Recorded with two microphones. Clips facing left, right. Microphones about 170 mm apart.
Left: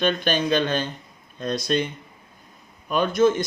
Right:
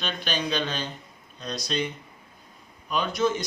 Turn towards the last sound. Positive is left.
turn(degrees=50)  # may be behind; listen again after turning